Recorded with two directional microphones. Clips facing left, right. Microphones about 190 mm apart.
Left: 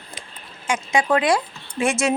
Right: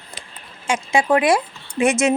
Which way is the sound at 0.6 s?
25° right (ahead or behind).